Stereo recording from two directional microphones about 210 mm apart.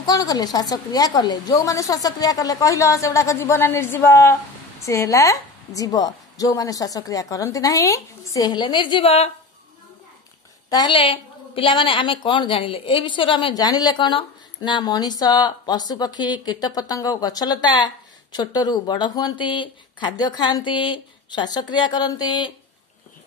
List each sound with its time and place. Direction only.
0.0 s a woman's voice: 15° left (ahead or behind)
10.7 s a woman's voice: 20° left (ahead or behind)